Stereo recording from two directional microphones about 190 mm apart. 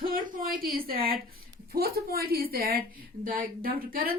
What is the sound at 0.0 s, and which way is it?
A woman's voice, 50° right (ahead or behind).